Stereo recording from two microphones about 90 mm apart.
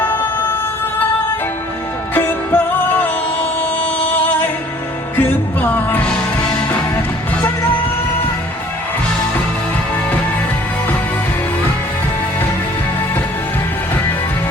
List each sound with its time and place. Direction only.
0.0 s a sound: 20° left (ahead or behind)
2.1 s music: 20° left (ahead or behind)
5.7 s music: 20° left (ahead or behind)